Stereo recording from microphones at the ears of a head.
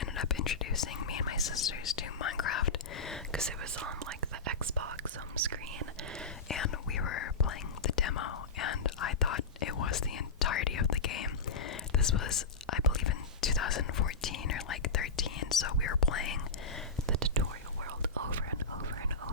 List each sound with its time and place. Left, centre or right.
0.0 s whispering: left
3.6 s whispering: right
6.5 s whispering: left